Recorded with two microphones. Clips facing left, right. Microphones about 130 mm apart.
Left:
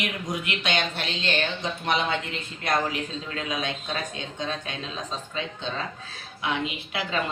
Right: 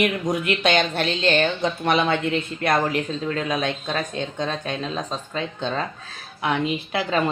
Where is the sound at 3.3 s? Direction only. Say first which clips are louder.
Right 6 dB; 50° right (ahead or behind).